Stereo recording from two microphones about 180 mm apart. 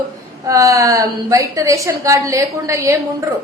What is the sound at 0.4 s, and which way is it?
A woman's voice, 20° right (ahead or behind).